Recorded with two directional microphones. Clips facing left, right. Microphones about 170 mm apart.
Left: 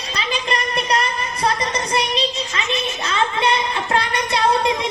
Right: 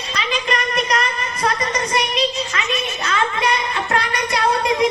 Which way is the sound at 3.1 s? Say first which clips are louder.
Left 1 dB; 30° left (ahead or behind).